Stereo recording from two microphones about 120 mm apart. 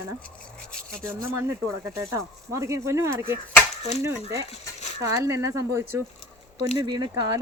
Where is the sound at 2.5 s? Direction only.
25° right (ahead or behind).